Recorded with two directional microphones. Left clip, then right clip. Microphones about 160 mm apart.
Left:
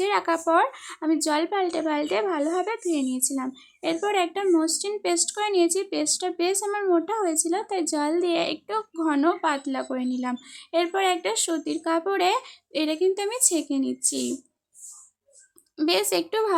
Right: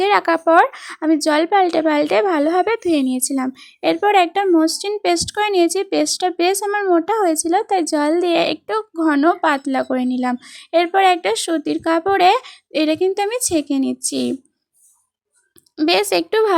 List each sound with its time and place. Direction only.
0.0 s speech: 45° right (ahead or behind)
15.8 s speech: 45° right (ahead or behind)